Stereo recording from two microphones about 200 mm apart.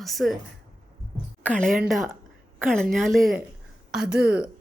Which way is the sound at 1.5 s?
5° left (ahead or behind).